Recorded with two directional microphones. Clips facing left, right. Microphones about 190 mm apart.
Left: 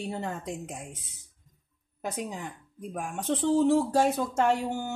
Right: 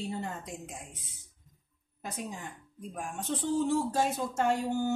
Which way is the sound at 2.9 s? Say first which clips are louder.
Left 5 dB; 70° left (ahead or behind).